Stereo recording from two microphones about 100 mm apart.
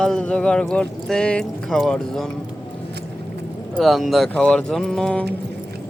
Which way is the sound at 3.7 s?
Centre (ahead or behind).